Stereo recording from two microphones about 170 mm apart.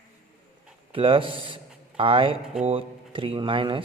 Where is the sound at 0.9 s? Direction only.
30° right (ahead or behind).